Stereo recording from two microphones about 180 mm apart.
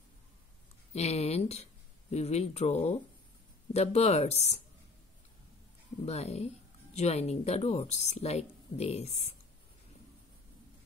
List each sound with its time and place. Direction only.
0.9 s speech: 35° left (ahead or behind)
6.0 s speech: 35° left (ahead or behind)